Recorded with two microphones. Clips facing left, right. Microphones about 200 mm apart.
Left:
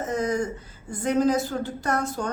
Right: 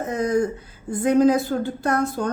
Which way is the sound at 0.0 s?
55° right (ahead or behind).